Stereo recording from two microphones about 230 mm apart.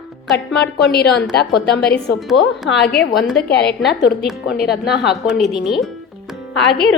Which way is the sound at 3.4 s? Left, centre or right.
Left.